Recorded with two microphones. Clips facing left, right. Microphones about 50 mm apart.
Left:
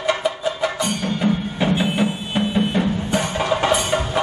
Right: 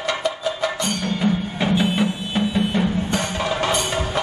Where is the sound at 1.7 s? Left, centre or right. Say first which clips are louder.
Right 2 dB; left.